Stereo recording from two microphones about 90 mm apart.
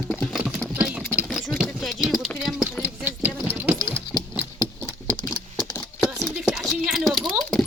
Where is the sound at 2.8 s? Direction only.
20° right (ahead or behind).